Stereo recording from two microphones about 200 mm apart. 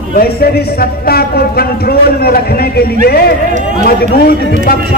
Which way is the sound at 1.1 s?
50° left (ahead or behind).